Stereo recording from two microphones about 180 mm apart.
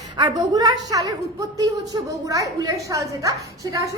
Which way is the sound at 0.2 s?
20° right (ahead or behind).